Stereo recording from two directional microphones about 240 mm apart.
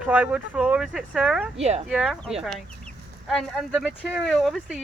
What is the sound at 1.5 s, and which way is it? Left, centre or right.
Speech, right.